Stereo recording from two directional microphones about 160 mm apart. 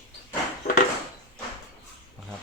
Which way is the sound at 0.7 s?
50° left (ahead or behind).